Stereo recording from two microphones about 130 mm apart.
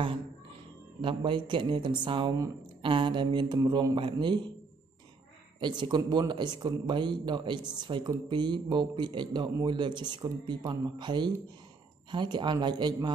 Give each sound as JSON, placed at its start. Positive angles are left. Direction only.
{"t": 1.0, "sound": "speech", "side_deg": -40}
{"t": 5.6, "sound": "speech", "side_deg": -35}